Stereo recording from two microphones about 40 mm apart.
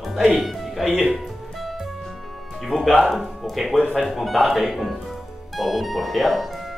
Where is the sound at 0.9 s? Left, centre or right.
Right.